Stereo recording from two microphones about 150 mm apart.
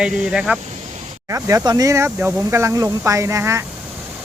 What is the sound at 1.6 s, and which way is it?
Speech, 25° right (ahead or behind).